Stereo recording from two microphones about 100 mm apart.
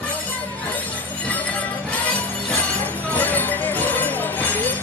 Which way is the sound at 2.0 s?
15° left (ahead or behind).